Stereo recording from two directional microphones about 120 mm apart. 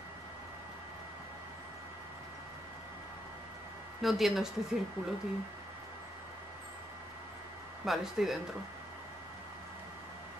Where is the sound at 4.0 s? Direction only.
Centre (ahead or behind).